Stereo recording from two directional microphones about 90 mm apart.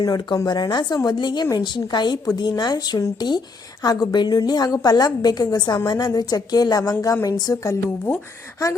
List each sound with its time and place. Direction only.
0.0 s a woman's voice: 50° left (ahead or behind); by 8.2 s 30° left (ahead or behind)